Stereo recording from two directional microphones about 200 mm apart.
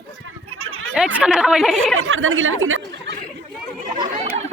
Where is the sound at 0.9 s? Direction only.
Centre (ahead or behind).